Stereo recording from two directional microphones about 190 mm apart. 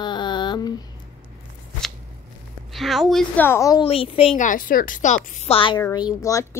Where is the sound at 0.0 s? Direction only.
25° left (ahead or behind).